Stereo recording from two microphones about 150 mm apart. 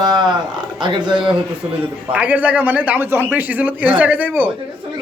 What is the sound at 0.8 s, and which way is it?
Speech, 30° right (ahead or behind).